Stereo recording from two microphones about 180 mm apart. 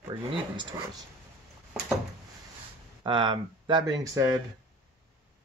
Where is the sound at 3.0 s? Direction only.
25° right (ahead or behind).